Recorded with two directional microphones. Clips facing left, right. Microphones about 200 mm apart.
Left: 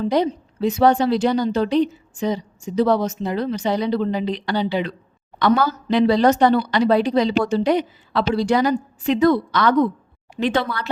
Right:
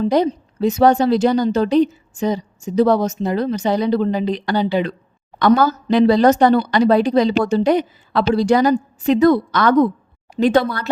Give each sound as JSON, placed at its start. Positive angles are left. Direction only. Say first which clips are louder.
{"t": 0.0, "sound": "a woman's voice", "louder": "right 3 dB", "side_deg": -40}